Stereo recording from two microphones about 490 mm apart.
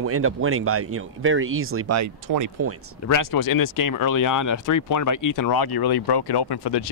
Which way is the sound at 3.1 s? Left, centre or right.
Left.